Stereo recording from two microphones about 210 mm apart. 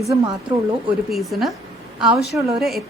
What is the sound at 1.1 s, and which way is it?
A woman's voice, centre (ahead or behind).